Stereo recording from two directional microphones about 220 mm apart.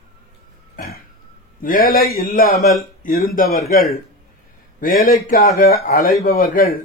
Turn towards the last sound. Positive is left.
turn(degrees=40)  # may be behind; listen again after turning